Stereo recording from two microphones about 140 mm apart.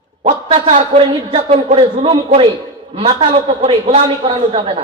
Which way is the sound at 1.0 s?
40° right (ahead or behind).